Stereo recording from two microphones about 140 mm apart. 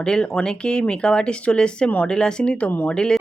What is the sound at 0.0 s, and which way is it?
Speech, 5° left (ahead or behind).